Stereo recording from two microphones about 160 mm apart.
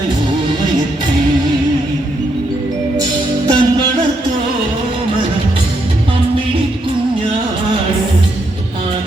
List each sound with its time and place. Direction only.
3.4 s music: 25° right (ahead or behind)